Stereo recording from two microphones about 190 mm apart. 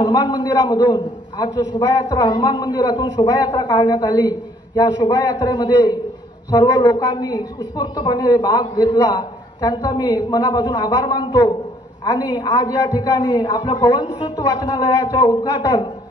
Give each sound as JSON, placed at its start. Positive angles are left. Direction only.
{"t": 0.0, "sound": "a man's voice", "side_deg": 25}